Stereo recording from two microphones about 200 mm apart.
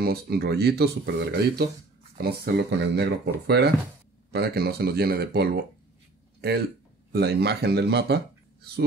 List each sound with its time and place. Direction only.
0.0 s speech: 50° right (ahead or behind)
7.1 s speech: 55° right (ahead or behind)